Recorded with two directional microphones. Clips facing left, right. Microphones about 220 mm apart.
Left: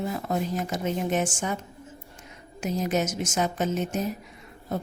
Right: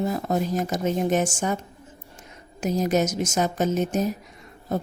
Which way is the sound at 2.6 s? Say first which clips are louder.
Right 4 dB; 40° right (ahead or behind).